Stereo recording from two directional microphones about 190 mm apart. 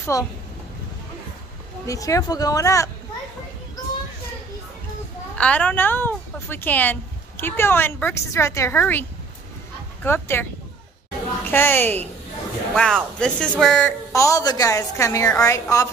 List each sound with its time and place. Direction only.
0.0 s speech: 15° left (ahead or behind)
1.9 s speech: 15° left (ahead or behind)
5.4 s speech: 5° left (ahead or behind)
10.0 s speech: 10° left (ahead or behind)
11.5 s speech: 10° left (ahead or behind)
14.1 s speech: 15° left (ahead or behind)